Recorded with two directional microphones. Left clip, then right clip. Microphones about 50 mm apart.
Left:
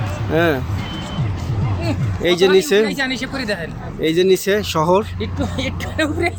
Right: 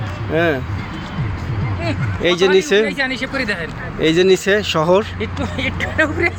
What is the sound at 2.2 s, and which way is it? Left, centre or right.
Speech, centre.